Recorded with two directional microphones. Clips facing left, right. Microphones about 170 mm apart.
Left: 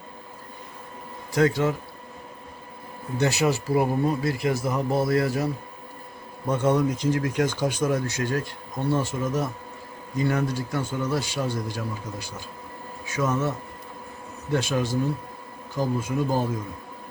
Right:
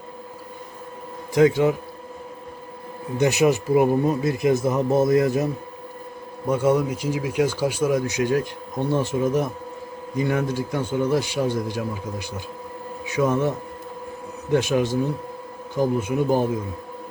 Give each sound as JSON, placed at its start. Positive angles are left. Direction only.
{"t": 1.3, "sound": "speech", "side_deg": -15}
{"t": 3.2, "sound": "speech", "side_deg": -15}
{"t": 6.5, "sound": "speech", "side_deg": -10}
{"t": 13.1, "sound": "speech", "side_deg": -15}
{"t": 14.5, "sound": "speech", "side_deg": -15}